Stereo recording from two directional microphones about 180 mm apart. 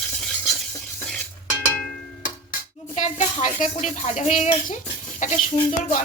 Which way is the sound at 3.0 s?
40° left (ahead or behind).